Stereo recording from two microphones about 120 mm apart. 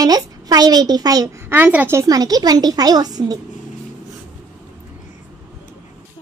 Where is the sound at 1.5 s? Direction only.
15° right (ahead or behind); by 3.4 s 35° right (ahead or behind).